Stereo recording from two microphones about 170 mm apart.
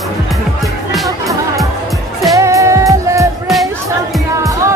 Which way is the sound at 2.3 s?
20° right (ahead or behind).